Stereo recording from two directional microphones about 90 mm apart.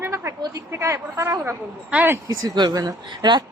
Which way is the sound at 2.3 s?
45° right (ahead or behind).